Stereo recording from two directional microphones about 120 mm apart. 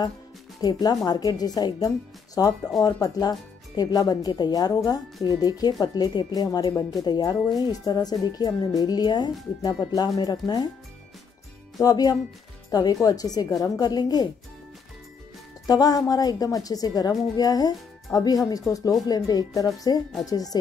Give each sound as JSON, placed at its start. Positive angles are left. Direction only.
{"t": 0.6, "sound": "speech", "side_deg": 35}
{"t": 11.8, "sound": "speech", "side_deg": 35}
{"t": 15.6, "sound": "speech", "side_deg": 30}